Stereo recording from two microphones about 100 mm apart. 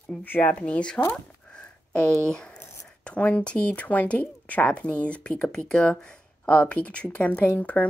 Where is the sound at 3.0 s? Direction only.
10° left (ahead or behind).